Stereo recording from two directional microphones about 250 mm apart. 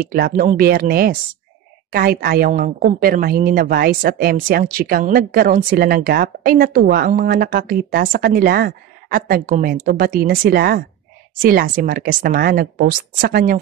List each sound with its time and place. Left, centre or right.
0.0 s a woman's voice: right